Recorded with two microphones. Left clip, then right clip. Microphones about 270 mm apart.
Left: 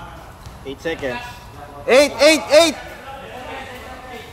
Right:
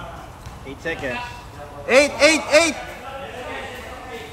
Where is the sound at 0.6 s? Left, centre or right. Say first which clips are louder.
Left 3 dB; left.